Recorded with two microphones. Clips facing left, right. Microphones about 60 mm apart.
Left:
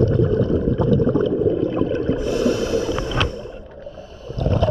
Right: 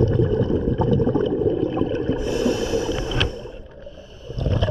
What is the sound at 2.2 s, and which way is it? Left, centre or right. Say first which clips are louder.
Snort: left 2 dB; centre.